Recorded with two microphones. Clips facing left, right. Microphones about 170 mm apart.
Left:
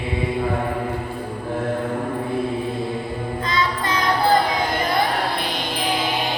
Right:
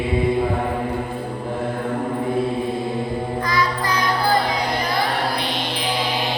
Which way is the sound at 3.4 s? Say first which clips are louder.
Even; 25° left (ahead or behind).